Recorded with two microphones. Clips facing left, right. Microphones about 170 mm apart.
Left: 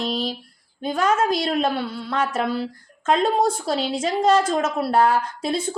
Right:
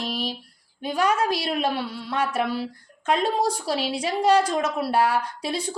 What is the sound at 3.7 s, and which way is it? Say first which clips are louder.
Speech: left 3 dB; 10° right (ahead or behind).